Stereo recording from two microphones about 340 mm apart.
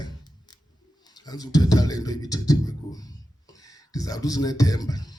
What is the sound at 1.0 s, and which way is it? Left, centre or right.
Speech, centre.